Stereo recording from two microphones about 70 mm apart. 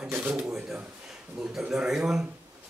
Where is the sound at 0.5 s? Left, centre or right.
Centre.